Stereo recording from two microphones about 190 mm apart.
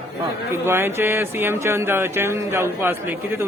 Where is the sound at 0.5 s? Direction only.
10° right (ahead or behind).